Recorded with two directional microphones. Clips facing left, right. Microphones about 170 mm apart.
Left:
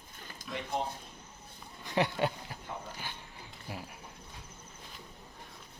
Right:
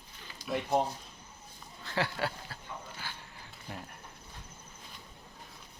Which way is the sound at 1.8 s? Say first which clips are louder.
Left 3 dB; 20° left (ahead or behind).